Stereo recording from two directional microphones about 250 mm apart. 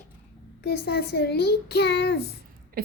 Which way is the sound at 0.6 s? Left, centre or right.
Left.